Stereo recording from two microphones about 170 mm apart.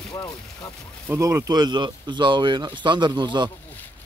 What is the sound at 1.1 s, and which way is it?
Speech, 20° right (ahead or behind).